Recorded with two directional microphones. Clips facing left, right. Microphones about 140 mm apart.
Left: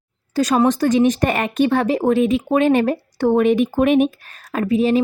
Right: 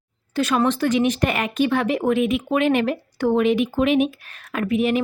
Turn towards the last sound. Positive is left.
turn(degrees=30)  # may be behind; listen again after turning